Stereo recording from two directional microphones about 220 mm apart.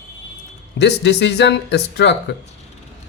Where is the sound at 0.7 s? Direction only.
50° left (ahead or behind).